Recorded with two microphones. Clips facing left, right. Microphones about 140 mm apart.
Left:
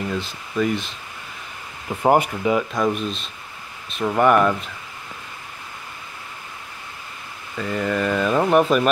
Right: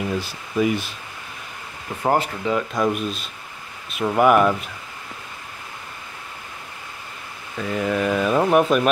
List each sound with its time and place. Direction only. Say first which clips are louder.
0.1 s speech: right 1 dB; 10° right (ahead or behind)
2.0 s speech: left 3 dB; 15° left (ahead or behind)
2.7 s speech: even; 5° right (ahead or behind)
7.5 s speech: even; 5° right (ahead or behind)